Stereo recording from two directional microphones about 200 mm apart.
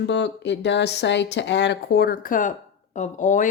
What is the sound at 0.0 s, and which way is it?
Speech, 60° left (ahead or behind).